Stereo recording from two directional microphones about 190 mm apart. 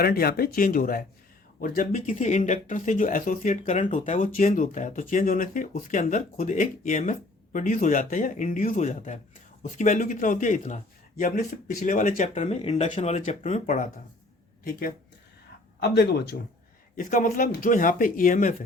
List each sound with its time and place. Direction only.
0.0 s speech: 50° left (ahead or behind)
15.8 s speech: 60° left (ahead or behind)
17.0 s speech: 45° left (ahead or behind)